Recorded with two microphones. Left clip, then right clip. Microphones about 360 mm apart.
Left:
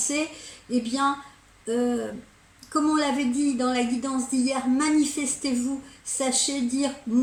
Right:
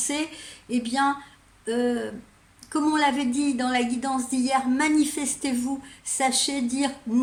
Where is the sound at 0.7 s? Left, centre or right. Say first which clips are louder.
Right 2 dB; right.